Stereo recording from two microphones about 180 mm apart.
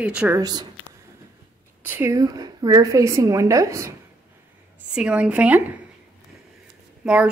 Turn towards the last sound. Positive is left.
turn(degrees=-5)  # may be behind; listen again after turning